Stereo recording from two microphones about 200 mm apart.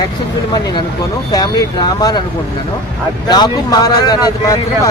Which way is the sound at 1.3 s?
20° left (ahead or behind).